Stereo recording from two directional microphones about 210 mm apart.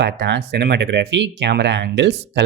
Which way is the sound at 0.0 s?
55° right (ahead or behind).